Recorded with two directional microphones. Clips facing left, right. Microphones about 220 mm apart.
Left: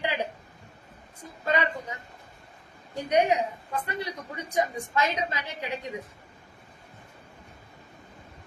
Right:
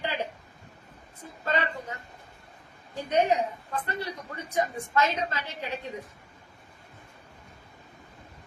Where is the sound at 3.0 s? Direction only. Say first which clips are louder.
Left 1 dB; 15° left (ahead or behind).